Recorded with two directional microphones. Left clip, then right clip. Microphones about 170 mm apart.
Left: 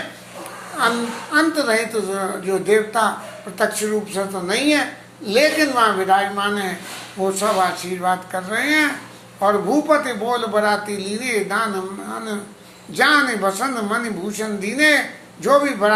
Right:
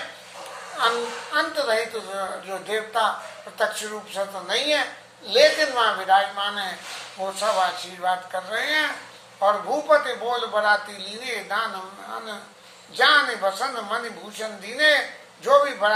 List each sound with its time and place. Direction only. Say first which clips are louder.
1.3 s a man's voice: left 6 dB; 15° left (ahead or behind)